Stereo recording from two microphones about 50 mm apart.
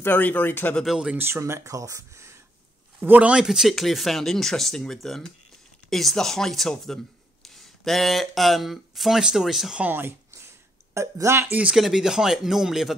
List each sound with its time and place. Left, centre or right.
0.0 s speech: left
0.8 s speech: centre
1.3 s speech: right
3.0 s speech: right
3.3 s speech: centre
3.7 s speech: centre
9.8 s a sound: right
11.0 s speech: right
11.7 s speech: centre